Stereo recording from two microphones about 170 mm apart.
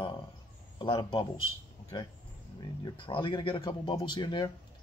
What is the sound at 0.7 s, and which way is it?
Speech, 30° left (ahead or behind).